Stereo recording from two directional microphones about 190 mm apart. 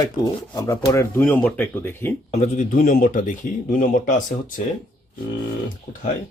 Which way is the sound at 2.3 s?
40° left (ahead or behind).